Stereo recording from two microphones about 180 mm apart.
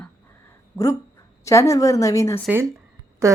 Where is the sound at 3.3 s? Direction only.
15° right (ahead or behind).